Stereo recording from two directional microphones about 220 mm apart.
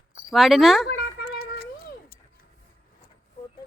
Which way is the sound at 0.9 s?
45° left (ahead or behind).